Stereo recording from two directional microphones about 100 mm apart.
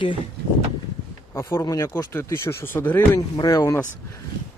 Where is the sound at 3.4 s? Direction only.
40° left (ahead or behind).